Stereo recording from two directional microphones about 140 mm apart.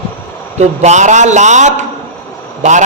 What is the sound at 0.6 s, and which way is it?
A man's voice, 55° right (ahead or behind).